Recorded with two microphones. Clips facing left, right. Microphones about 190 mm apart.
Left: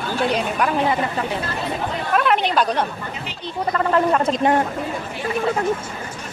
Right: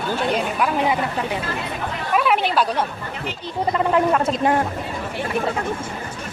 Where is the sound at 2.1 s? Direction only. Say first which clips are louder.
Even; 5° right (ahead or behind).